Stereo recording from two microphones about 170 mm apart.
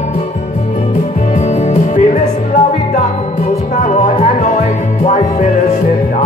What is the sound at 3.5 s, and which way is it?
Music, 40° left (ahead or behind).